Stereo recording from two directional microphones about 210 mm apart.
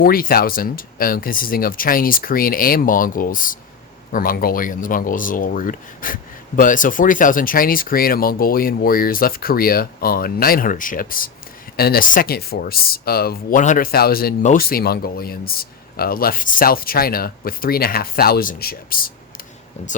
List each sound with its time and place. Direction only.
0.0 s speech: 45° left (ahead or behind)